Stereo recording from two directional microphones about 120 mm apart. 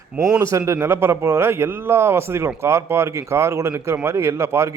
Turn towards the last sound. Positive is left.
turn(degrees=-25)  # may be behind; listen again after turning